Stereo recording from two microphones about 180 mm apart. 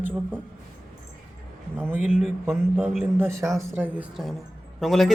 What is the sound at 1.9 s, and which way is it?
Speech, 40° left (ahead or behind).